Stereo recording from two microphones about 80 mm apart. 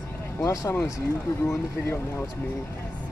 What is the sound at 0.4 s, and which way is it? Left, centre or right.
Speech, left.